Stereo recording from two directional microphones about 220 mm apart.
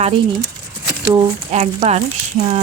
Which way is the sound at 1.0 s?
15° right (ahead or behind).